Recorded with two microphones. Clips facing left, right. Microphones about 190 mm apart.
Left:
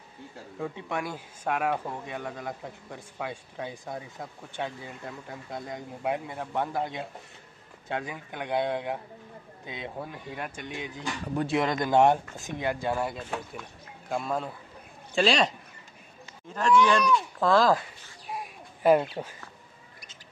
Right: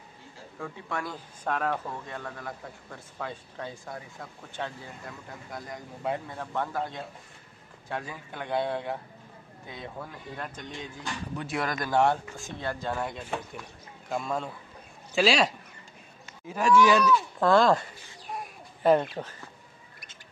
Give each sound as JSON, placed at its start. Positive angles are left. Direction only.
{"t": 0.6, "sound": "speech", "side_deg": 20}
{"t": 11.4, "sound": "speech", "side_deg": 25}
{"t": 13.1, "sound": "speech", "side_deg": 0}
{"t": 18.3, "sound": "bird", "side_deg": 5}